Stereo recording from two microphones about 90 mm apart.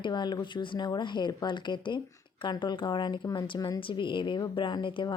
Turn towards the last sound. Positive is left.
turn(degrees=70)  # may be behind; listen again after turning